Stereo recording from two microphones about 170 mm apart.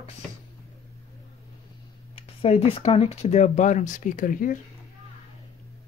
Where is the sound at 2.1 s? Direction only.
35° left (ahead or behind); by 4.6 s 50° left (ahead or behind).